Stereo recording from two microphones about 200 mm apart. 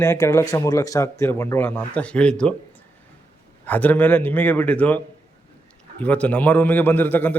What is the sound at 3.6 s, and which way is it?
A man's voice, 10° left (ahead or behind).